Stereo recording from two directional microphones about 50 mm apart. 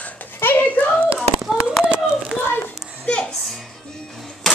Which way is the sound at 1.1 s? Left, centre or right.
Centre.